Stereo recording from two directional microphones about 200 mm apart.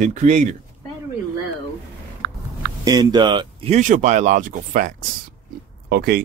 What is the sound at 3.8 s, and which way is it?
Speech, 40° right (ahead or behind).